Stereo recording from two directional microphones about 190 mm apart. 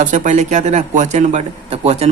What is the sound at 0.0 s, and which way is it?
Speech, 40° right (ahead or behind).